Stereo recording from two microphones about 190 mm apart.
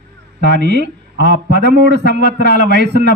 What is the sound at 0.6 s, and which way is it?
A man's voice, 60° right (ahead or behind).